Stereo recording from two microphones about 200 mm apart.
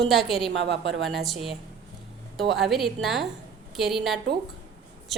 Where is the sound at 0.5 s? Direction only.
65° right (ahead or behind).